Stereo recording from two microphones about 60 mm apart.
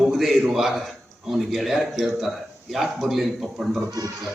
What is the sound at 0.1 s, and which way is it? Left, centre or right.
A man's voice, centre.